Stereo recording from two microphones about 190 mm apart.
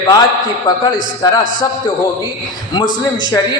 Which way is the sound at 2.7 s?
20° left (ahead or behind).